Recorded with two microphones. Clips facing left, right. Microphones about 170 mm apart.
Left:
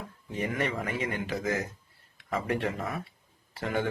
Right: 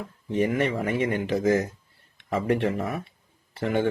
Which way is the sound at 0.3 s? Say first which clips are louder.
Right 7 dB; 25° right (ahead or behind).